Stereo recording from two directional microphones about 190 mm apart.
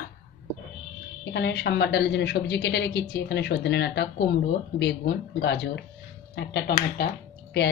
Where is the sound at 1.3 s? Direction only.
65° left (ahead or behind).